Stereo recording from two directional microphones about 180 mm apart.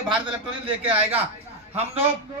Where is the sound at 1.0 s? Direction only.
10° right (ahead or behind).